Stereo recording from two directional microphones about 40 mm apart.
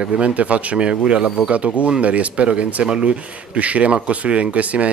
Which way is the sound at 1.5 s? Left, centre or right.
Right.